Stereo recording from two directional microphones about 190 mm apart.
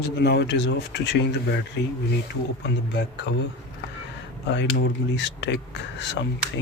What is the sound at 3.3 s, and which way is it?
Speech, 65° left (ahead or behind).